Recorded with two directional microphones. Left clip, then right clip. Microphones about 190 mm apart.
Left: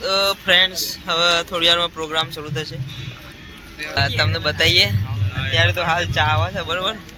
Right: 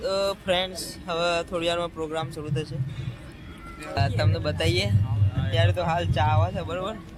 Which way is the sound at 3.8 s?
Centre (ahead or behind).